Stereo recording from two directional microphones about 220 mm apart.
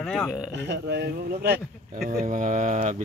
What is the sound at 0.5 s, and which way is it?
A man's voice, 50° right (ahead or behind).